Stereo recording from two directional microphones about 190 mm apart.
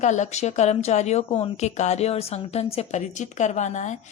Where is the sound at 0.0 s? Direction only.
40° left (ahead or behind).